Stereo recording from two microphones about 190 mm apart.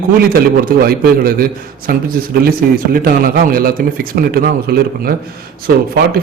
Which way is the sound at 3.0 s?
50° right (ahead or behind).